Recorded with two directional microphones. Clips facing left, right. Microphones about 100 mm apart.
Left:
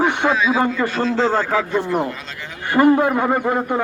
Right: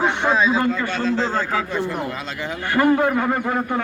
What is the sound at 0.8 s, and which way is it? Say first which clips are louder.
Speech: left 3 dB; 40° left (ahead or behind).